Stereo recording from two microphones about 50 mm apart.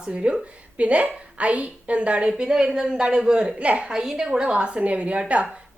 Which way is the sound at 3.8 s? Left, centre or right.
Centre.